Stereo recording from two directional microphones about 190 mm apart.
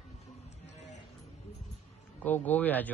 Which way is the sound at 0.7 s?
35° left (ahead or behind).